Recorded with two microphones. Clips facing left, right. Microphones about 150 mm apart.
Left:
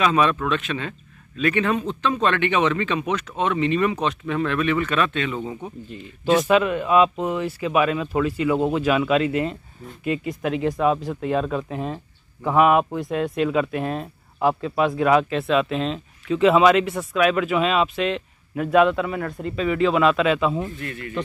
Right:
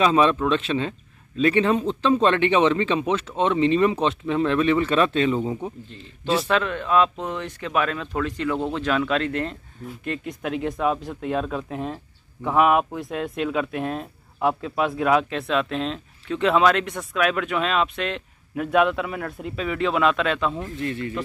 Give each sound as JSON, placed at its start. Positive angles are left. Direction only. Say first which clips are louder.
{"t": 0.0, "sound": "speech", "louder": "right 1 dB", "side_deg": -30}
{"t": 6.4, "sound": "speech", "louder": "left 5 dB", "side_deg": 10}
{"t": 20.8, "sound": "speech", "louder": "right 5 dB", "side_deg": -30}